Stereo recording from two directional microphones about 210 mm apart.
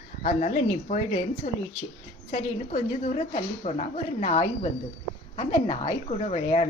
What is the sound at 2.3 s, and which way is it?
Speech, 35° left (ahead or behind).